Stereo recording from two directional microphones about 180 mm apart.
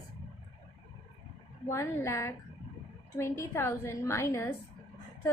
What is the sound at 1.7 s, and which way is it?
A woman's voice, 15° left (ahead or behind).